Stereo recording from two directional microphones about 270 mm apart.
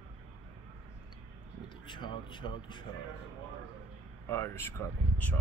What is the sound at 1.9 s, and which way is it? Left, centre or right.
Speech, centre.